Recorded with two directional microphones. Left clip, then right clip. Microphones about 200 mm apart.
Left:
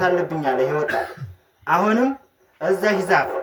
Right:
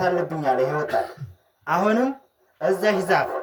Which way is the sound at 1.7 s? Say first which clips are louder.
Left 3 dB; 60° right (ahead or behind).